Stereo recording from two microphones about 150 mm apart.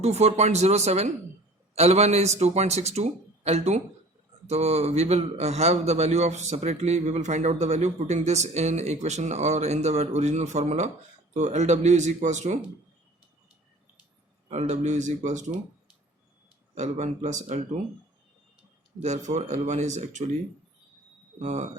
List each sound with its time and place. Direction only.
0.0 s a man's voice: 45° right (ahead or behind)
14.5 s a man's voice: 50° right (ahead or behind)
16.7 s a man's voice: 50° right (ahead or behind)
19.0 s a man's voice: 50° right (ahead or behind)
21.3 s a man's voice: 50° right (ahead or behind)